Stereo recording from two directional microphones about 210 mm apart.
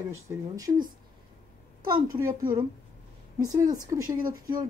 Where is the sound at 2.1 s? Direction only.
15° right (ahead or behind).